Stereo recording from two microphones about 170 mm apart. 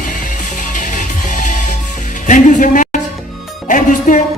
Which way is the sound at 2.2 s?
50° left (ahead or behind).